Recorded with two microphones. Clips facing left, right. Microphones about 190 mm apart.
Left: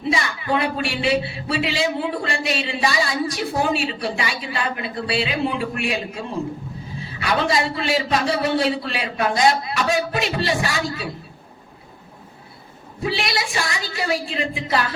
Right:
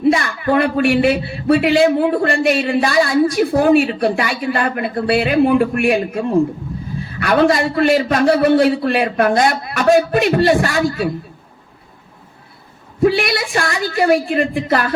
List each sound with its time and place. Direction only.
0.0 s a man's voice: 55° right (ahead or behind)
13.0 s a man's voice: 55° right (ahead or behind)